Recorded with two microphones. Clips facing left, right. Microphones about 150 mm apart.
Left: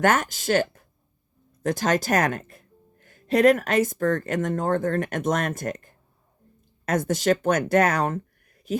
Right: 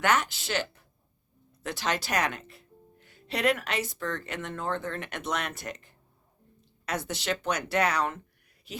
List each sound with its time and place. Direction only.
0.0 s speech: 45° left (ahead or behind)